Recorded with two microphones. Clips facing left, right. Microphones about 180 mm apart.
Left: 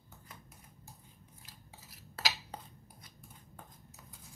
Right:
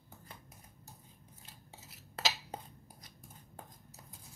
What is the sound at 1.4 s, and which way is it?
Cutlery, 25° right (ahead or behind).